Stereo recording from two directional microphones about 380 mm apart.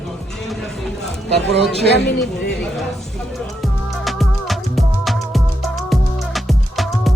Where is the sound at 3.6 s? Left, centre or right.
Centre.